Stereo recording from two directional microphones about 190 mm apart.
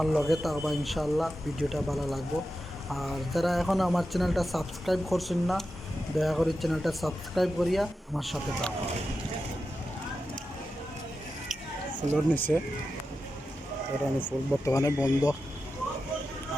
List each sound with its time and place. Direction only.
0.0 s a man's voice: centre (ahead or behind)
12.1 s speech: 10° left (ahead or behind)
14.2 s speech: 10° left (ahead or behind)